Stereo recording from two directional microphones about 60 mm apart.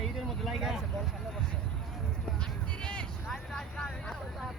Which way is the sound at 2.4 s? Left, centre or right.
Centre.